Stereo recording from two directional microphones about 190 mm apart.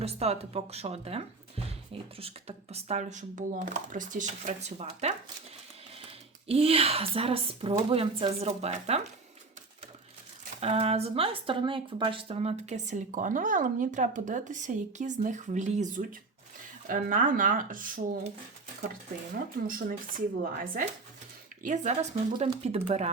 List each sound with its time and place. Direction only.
0.0 s speech: 35° right (ahead or behind)
6.5 s speech: 30° right (ahead or behind)
10.6 s speech: 35° right (ahead or behind)
19.5 s speech: 50° right (ahead or behind)
22.3 s speech: 30° right (ahead or behind)